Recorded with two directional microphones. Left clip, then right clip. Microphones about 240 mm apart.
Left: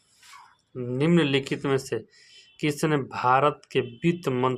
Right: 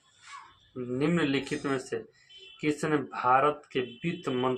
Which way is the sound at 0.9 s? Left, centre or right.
Left.